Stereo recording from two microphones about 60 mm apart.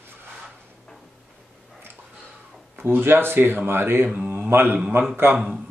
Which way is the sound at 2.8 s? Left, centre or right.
Right.